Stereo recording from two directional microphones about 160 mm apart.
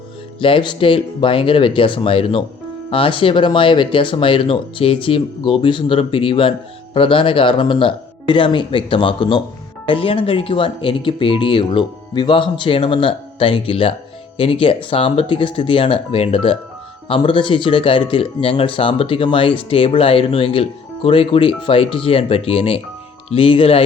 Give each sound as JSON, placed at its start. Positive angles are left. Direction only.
{"t": 0.3, "sound": "speech", "side_deg": 35}